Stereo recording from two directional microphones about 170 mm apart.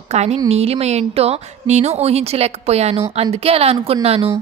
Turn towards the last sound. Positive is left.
turn(degrees=-35)  # may be behind; listen again after turning